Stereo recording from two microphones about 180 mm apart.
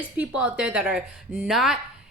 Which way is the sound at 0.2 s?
5° right (ahead or behind).